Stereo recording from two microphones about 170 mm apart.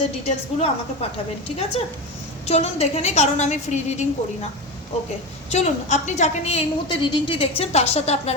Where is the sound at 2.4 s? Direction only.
35° left (ahead or behind).